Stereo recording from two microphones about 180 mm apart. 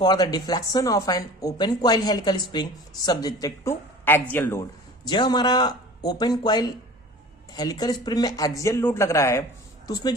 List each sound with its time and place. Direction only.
0.0 s speech: 25° left (ahead or behind)
5.0 s a woman's voice: 25° left (ahead or behind)